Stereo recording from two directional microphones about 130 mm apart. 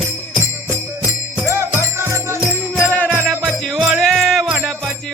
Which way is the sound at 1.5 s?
20° right (ahead or behind).